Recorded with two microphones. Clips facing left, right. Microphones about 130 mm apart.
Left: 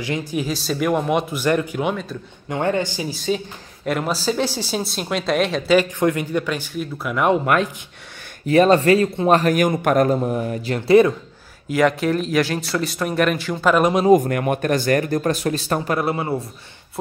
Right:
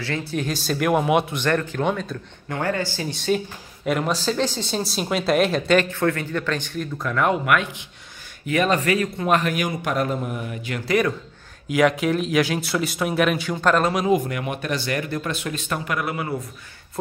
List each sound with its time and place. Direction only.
0.0 s speech: 15° left (ahead or behind)
0.5 s speech: centre (ahead or behind)
2.5 s speech: 20° left (ahead or behind)
3.1 s speech: centre (ahead or behind)
5.9 s speech: 15° left (ahead or behind)
8.5 s speech: 35° left (ahead or behind)
10.1 s speech: 35° left (ahead or behind)
11.7 s speech: centre (ahead or behind)
13.9 s speech: 40° left (ahead or behind)